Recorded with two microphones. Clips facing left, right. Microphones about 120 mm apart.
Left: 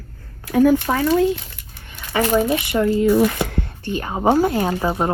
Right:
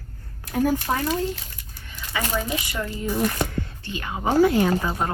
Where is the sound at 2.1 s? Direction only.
45° left (ahead or behind).